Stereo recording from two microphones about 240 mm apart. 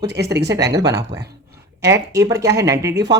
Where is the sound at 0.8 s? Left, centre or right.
Right.